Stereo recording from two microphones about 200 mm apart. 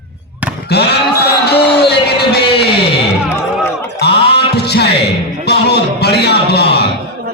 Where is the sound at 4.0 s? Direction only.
55° left (ahead or behind).